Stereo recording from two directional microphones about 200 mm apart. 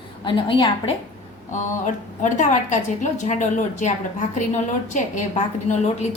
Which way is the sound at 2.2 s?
35° left (ahead or behind).